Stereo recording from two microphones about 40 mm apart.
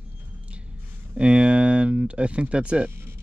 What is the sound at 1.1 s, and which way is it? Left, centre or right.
Speech, right.